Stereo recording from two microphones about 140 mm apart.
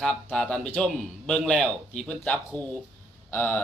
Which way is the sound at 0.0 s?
5° left (ahead or behind).